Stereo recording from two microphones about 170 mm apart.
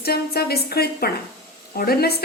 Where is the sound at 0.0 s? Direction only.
65° left (ahead or behind).